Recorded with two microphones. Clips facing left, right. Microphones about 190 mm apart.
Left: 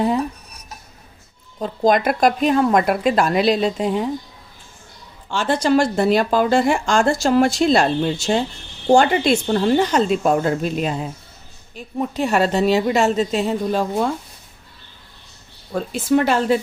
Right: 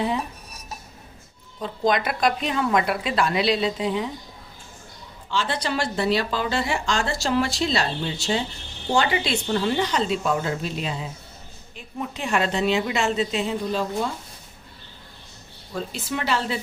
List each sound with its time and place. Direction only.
1.5 s speech: 45° left (ahead or behind)
5.3 s a woman's voice: 50° left (ahead or behind)
15.7 s speech: 50° left (ahead or behind)